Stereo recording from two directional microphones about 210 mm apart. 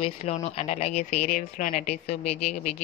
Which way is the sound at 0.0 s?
30° left (ahead or behind).